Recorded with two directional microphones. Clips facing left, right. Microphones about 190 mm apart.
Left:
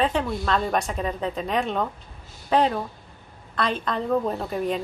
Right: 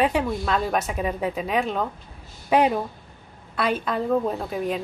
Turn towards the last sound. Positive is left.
turn(degrees=0)  # may be behind; listen again after turning